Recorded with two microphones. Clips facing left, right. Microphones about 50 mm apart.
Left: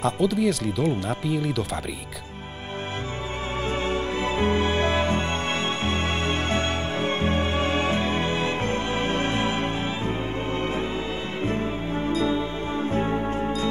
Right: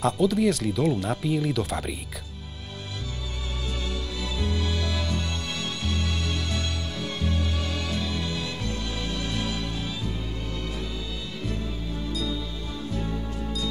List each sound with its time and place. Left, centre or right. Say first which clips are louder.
0.0 s speech: even; centre
3.8 s music: left 8 dB; left